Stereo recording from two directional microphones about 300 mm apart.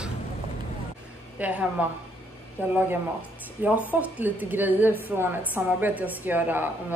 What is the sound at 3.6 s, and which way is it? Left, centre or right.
A woman's voice, centre.